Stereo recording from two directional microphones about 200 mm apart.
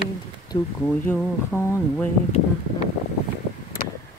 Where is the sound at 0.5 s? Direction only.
25° left (ahead or behind).